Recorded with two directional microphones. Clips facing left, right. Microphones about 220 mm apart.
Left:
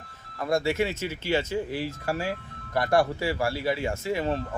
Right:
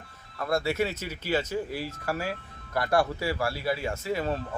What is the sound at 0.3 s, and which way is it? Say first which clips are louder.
Speech: left 2 dB; 15° left (ahead or behind).